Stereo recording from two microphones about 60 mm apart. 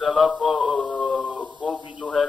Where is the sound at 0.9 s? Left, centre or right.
Centre.